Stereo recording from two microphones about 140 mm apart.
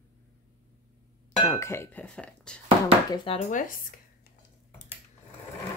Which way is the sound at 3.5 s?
70° left (ahead or behind).